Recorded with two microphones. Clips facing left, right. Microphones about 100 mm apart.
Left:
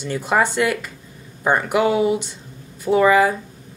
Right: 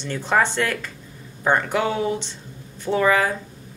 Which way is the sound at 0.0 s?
10° left (ahead or behind).